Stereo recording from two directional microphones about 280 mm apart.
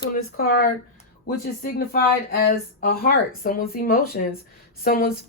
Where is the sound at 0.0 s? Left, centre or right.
Left.